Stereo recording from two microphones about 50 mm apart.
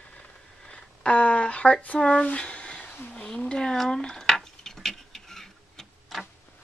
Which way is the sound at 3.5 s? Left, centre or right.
Centre.